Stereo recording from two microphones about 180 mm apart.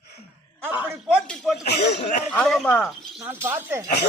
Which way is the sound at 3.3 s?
10° right (ahead or behind).